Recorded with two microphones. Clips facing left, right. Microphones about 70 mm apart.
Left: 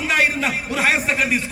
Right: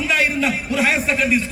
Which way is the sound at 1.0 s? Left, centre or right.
Left.